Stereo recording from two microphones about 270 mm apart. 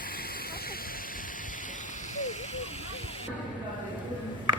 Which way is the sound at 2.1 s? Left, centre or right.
Left.